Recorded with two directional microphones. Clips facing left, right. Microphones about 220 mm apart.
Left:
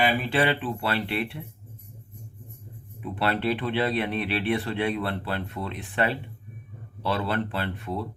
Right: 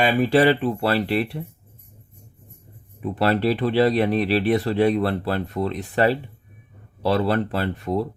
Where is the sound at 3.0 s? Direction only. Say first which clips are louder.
Right 6 dB; 40° right (ahead or behind).